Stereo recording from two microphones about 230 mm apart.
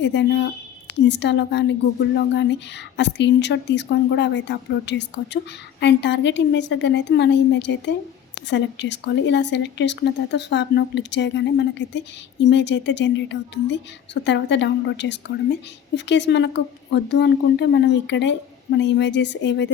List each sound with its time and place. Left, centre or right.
0.0 s speech: left